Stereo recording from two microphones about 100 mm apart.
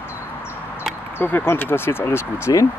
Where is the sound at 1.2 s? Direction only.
20° left (ahead or behind).